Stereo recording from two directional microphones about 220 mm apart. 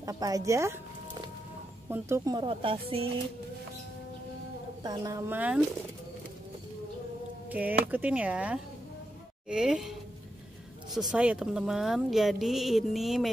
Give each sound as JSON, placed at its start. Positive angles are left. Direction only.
{"t": 0.0, "sound": "a woman's voice", "side_deg": -15}
{"t": 1.9, "sound": "speech", "side_deg": -10}
{"t": 4.8, "sound": "a woman's voice", "side_deg": -15}
{"t": 7.4, "sound": "speech", "side_deg": -5}